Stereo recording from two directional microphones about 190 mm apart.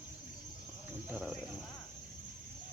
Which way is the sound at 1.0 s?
10° right (ahead or behind).